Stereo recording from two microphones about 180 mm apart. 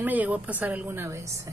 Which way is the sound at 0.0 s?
10° right (ahead or behind).